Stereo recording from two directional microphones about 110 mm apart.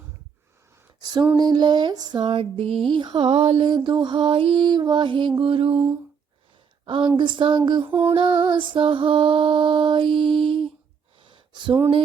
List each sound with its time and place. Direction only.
1.4 s music: 40° right (ahead or behind); by 2.8 s 60° right (ahead or behind)
2.9 s music: 45° right (ahead or behind); by 3.7 s 60° right (ahead or behind)
3.7 s music: 45° right (ahead or behind)
6.8 s a woman's voice: 50° right (ahead or behind)
7.2 s music: 50° right (ahead or behind)
11.2 s a sound: 45° right (ahead or behind)